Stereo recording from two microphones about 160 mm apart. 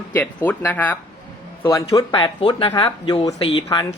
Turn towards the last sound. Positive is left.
turn(degrees=30)  # may be behind; listen again after turning